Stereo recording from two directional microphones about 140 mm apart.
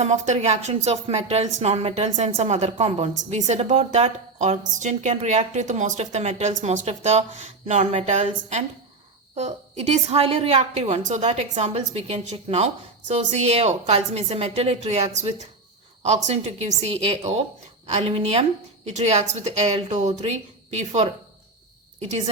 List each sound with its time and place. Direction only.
0.0 s a woman's voice: 55° right (ahead or behind)
17.8 s a woman's voice: 50° right (ahead or behind)